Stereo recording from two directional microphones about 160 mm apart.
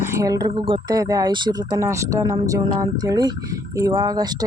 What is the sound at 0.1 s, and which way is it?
Speech, 20° right (ahead or behind).